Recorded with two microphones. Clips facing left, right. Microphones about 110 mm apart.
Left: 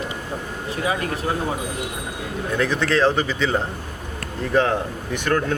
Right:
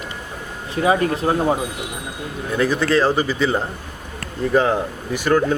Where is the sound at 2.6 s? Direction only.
5° right (ahead or behind).